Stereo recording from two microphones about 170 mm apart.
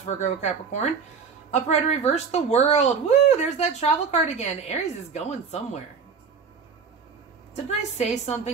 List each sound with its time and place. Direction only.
0.0 s speech: 45° left (ahead or behind)
7.5 s speech: 40° left (ahead or behind)